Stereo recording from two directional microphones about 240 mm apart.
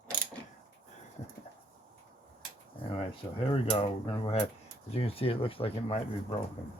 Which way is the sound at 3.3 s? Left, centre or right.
Left.